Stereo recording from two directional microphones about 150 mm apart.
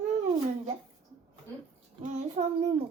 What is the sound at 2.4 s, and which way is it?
Child singing, 40° right (ahead or behind).